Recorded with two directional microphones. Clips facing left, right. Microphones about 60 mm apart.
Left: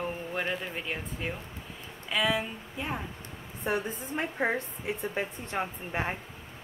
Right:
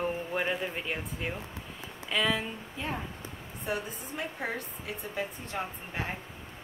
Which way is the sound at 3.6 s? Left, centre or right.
Left.